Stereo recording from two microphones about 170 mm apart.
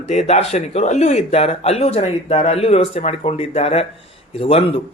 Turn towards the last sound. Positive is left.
turn(degrees=35)  # may be behind; listen again after turning